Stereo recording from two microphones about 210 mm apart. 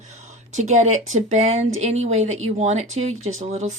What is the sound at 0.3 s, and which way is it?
Speech, 35° right (ahead or behind).